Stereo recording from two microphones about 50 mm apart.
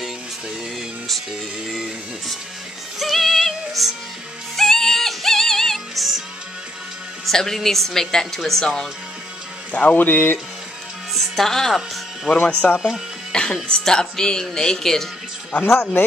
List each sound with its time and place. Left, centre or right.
1.7 s music: centre
7.2 s speech: centre
9.7 s speech: left
11.1 s speech: centre
12.6 s speech: centre
13.3 s music: centre
13.7 s speech: centre
15.6 s speech: left